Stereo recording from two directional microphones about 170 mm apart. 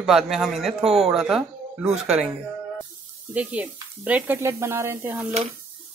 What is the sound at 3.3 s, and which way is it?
Speech, 10° right (ahead or behind).